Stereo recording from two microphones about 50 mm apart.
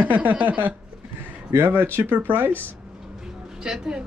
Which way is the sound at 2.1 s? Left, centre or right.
Right.